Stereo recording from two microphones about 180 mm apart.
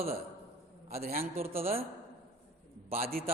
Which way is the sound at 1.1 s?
55° right (ahead or behind).